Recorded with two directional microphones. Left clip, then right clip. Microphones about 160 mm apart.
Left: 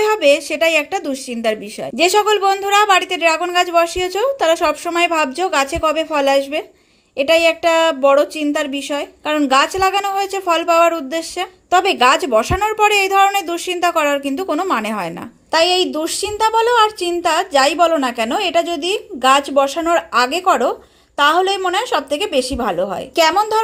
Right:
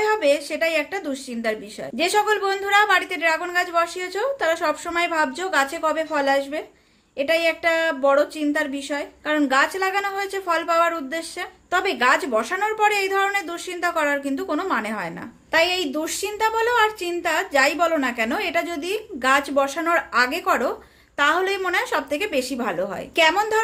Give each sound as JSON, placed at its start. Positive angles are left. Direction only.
{"t": 0.0, "sound": "a woman's voice", "side_deg": 45}